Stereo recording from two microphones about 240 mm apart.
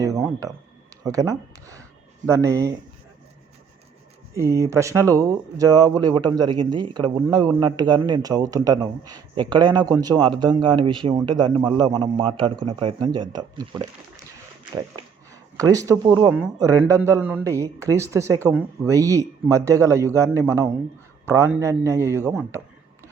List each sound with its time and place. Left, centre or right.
1.0 s speech: centre
4.4 s a man's voice: centre
14.9 s speech: centre